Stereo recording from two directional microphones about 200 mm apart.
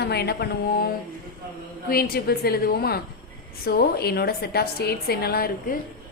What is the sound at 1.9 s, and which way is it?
A woman's voice, 50° left (ahead or behind).